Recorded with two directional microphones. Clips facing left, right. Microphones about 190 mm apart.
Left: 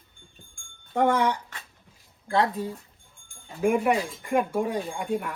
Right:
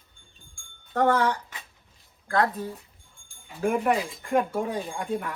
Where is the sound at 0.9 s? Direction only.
15° left (ahead or behind).